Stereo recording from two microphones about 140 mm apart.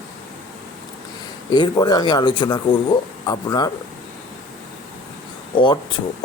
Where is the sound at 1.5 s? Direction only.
30° left (ahead or behind).